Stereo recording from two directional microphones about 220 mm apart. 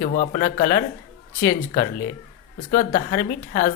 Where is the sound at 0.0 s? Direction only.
40° left (ahead or behind).